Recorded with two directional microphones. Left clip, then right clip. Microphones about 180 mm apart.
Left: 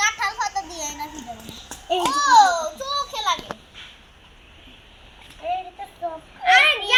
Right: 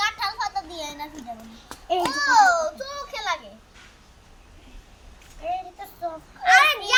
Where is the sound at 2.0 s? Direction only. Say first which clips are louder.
Left 3 dB; 30° right (ahead or behind).